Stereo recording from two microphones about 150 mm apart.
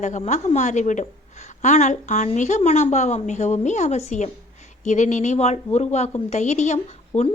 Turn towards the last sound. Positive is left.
turn(degrees=50)  # may be behind; listen again after turning